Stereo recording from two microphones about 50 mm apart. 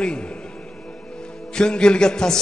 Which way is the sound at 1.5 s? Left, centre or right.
Centre.